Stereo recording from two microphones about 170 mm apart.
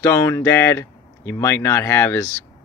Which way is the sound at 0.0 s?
15° left (ahead or behind).